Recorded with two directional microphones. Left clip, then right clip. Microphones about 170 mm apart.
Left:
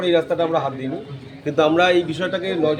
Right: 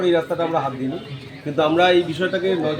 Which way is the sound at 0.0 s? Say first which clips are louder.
Left 1 dB; 20° left (ahead or behind).